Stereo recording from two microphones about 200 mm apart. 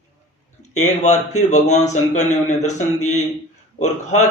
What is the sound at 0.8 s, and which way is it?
Speech, 35° left (ahead or behind).